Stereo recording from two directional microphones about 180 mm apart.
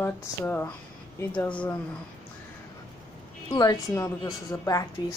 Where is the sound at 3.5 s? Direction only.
20° left (ahead or behind).